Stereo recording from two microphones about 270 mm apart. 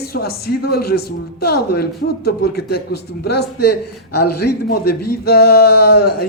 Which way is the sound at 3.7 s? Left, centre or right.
Left.